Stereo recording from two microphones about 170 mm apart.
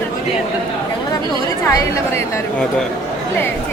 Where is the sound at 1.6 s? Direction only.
15° left (ahead or behind).